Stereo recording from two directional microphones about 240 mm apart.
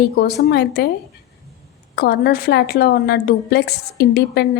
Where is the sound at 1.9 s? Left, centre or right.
Left.